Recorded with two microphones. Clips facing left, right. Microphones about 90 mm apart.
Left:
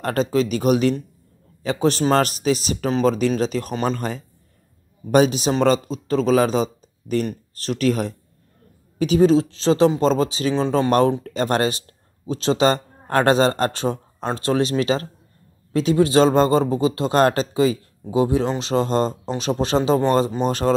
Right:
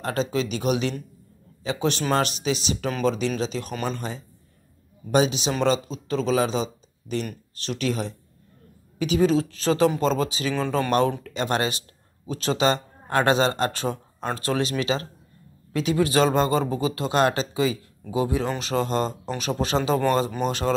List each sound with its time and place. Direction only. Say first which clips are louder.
0.0 s speech: left 5 dB; 50° left (ahead or behind); by 20.4 s 30° left (ahead or behind)
20.4 s speech: left 4 dB; 40° left (ahead or behind)